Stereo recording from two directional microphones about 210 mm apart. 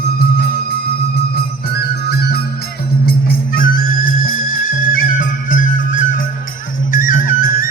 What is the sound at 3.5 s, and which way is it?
Music, 40° left (ahead or behind).